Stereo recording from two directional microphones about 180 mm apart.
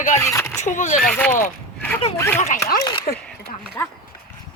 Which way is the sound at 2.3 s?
40° left (ahead or behind).